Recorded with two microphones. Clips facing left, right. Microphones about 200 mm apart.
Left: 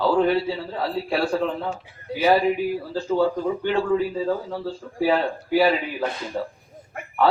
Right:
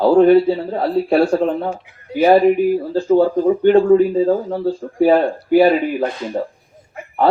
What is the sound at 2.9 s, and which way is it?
A man's voice, 50° right (ahead or behind).